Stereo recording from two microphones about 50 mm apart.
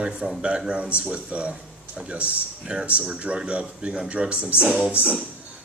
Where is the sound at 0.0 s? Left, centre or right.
Centre.